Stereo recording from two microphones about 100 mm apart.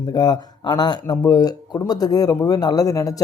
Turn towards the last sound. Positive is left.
turn(degrees=35)  # may be behind; listen again after turning